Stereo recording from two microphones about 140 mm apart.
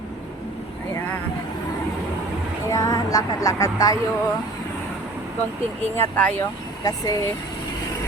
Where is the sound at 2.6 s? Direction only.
25° left (ahead or behind).